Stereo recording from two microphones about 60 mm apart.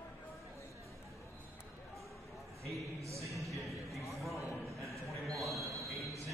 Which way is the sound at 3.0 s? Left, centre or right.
Right.